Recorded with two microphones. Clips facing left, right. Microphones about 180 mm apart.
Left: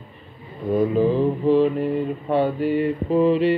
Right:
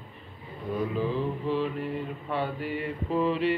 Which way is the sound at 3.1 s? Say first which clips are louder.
Left 8 dB; 20° left (ahead or behind).